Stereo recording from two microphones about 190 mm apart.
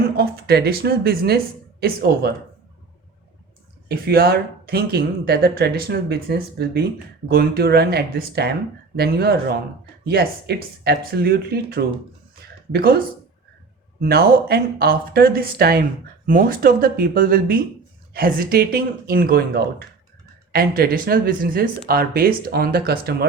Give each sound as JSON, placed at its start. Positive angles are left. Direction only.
{"t": 0.2, "sound": "speech", "side_deg": -55}
{"t": 3.8, "sound": "speech", "side_deg": -55}
{"t": 14.0, "sound": "speech", "side_deg": -55}